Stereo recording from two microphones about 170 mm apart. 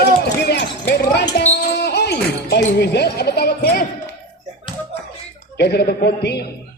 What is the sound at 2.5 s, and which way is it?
Speech, 75° left (ahead or behind).